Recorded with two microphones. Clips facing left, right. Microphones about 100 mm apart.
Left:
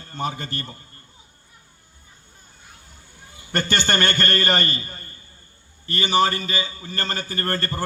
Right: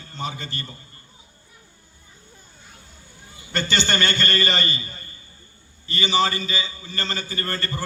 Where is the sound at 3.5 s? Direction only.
50° left (ahead or behind).